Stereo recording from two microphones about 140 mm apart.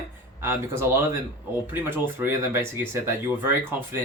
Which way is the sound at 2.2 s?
15° right (ahead or behind).